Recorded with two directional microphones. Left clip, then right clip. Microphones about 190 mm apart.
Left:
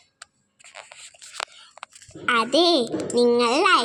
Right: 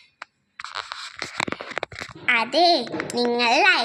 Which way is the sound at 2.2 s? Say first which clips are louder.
Right 1 dB; 15° left (ahead or behind).